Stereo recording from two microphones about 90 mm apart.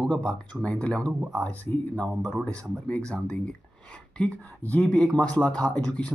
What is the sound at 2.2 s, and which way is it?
Speech, centre (ahead or behind).